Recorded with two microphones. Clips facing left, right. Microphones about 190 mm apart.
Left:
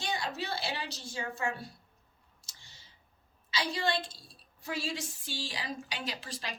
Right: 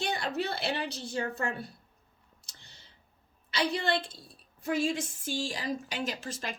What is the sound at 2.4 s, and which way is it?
Clicking, 60° right (ahead or behind).